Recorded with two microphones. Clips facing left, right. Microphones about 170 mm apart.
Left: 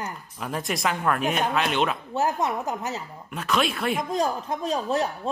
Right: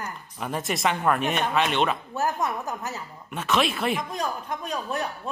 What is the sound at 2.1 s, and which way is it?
Speech, 20° left (ahead or behind).